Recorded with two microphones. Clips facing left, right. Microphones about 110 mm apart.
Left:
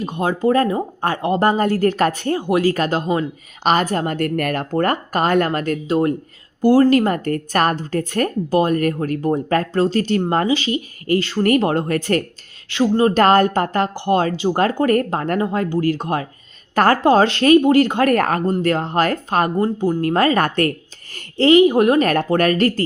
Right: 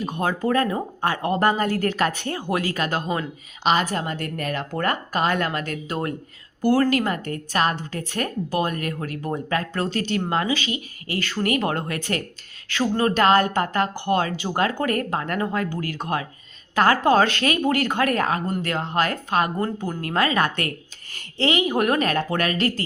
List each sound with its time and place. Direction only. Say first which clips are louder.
0.0 s speech: left 5 dB; 25° left (ahead or behind)
2.4 s speech: left 7 dB; 25° left (ahead or behind)
3.6 s a woman's voice: left 4 dB; 45° left (ahead or behind)
4.7 s speech: left 5 dB; 40° left (ahead or behind)
5.9 s speech: left 11 dB; 30° left (ahead or behind)
12.6 s speech: left 6 dB; 25° left (ahead or behind)
13.1 s speech: left 2 dB; 40° left (ahead or behind)
15.4 s speech: left 6 dB; 30° left (ahead or behind)
16.7 s a woman's voice: left 4 dB; 40° left (ahead or behind)
17.0 s speech: left 4 dB; 30° left (ahead or behind)
18.0 s a woman's voice: left 6 dB; 50° left (ahead or behind)
18.4 s speech: left 7 dB; 35° left (ahead or behind)
19.5 s speech: left 8 dB; 25° left (ahead or behind)
22.0 s a woman's voice: left 6 dB; 45° left (ahead or behind)